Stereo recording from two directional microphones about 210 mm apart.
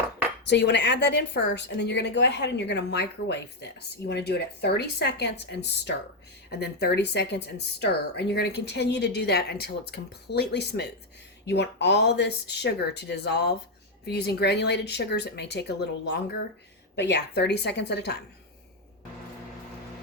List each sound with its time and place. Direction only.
0.4 s a woman's voice: 55° left (ahead or behind)